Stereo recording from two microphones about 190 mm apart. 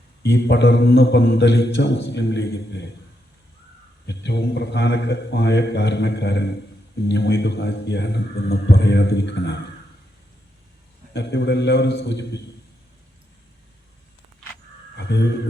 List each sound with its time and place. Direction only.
0.2 s a man's voice: 60° left (ahead or behind)
4.0 s a man's voice: 60° left (ahead or behind)
11.1 s a man's voice: 60° left (ahead or behind)